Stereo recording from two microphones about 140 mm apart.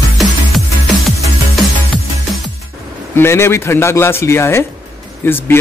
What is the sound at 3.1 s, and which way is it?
Speech, 15° left (ahead or behind).